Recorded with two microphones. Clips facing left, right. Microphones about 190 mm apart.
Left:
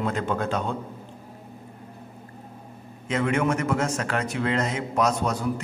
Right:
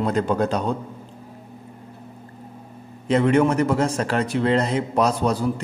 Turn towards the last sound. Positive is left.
turn(degrees=-30)  # may be behind; listen again after turning